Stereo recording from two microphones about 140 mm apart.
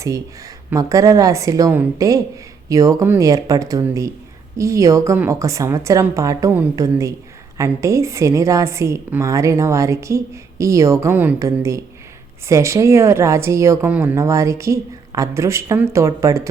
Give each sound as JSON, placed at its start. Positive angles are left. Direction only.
{"t": 0.0, "sound": "a woman's voice", "side_deg": -25}